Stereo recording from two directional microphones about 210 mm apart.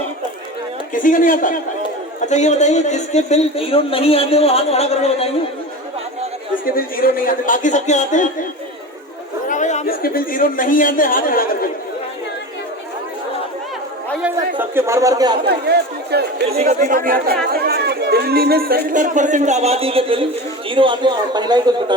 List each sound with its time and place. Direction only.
0.9 s a woman's voice: 40° left (ahead or behind)
6.7 s speech: 45° left (ahead or behind)
9.5 s speech: 35° left (ahead or behind)
14.2 s speech: 10° right (ahead or behind)
15.4 s a man's voice: 50° right (ahead or behind); by 21.9 s 20° right (ahead or behind)